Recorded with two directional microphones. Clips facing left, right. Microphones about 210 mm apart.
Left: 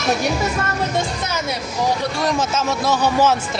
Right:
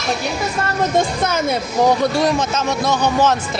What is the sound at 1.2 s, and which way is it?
Speech, 55° right (ahead or behind).